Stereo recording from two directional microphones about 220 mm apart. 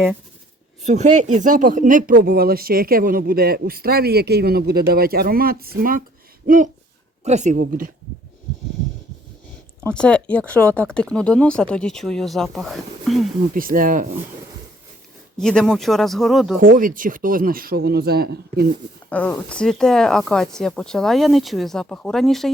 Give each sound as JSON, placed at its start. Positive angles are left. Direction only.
{"t": 0.9, "sound": "a man's voice", "side_deg": -30}
{"t": 9.9, "sound": "speech", "side_deg": 5}
{"t": 13.5, "sound": "a man's voice", "side_deg": -40}
{"t": 15.4, "sound": "speech", "side_deg": 5}
{"t": 16.6, "sound": "a man's voice", "side_deg": -40}
{"t": 19.1, "sound": "speech", "side_deg": 5}